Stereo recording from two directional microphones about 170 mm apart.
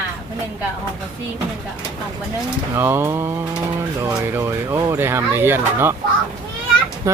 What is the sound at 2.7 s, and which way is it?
Speech, 15° right (ahead or behind).